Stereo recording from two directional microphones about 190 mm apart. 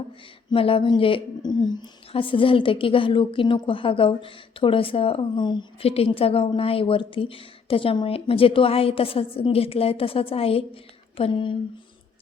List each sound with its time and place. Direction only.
0.5 s a woman's voice: 30° left (ahead or behind)